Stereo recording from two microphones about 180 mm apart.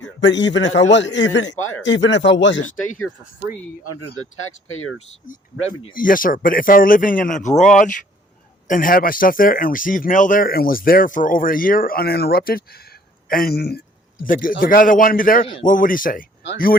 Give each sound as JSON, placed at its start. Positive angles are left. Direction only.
{"t": 0.2, "sound": "a man's voice", "side_deg": 80}
{"t": 4.9, "sound": "speech", "side_deg": 45}
{"t": 14.3, "sound": "speech", "side_deg": 50}